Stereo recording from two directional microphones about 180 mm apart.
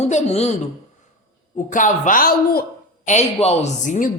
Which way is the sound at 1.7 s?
45° left (ahead or behind).